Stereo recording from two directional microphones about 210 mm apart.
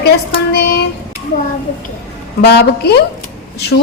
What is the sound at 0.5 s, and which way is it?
Speech, 50° left (ahead or behind).